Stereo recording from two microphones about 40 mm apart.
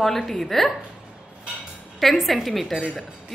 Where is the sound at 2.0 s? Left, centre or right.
Centre.